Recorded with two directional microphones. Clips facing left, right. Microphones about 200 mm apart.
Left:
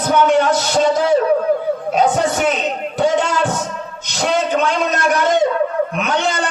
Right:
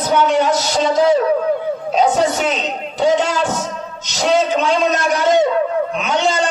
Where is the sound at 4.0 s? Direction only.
55° left (ahead or behind).